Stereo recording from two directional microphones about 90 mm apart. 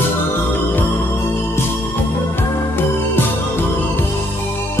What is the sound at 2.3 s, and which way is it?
Music, 25° left (ahead or behind).